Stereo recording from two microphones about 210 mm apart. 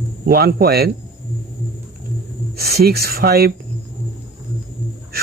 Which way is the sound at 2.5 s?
45° right (ahead or behind).